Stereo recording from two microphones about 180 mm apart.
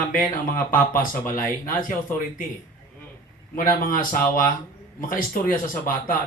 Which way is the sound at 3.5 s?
50° left (ahead or behind).